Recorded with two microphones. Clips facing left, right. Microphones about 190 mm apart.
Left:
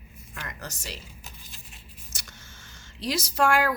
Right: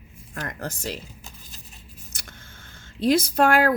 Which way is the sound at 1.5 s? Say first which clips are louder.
Right 2 dB; 40° right (ahead or behind).